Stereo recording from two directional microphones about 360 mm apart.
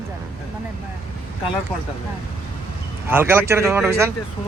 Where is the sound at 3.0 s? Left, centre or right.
Centre.